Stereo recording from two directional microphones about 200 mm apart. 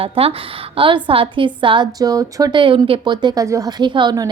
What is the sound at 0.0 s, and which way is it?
A woman's voice, 30° right (ahead or behind).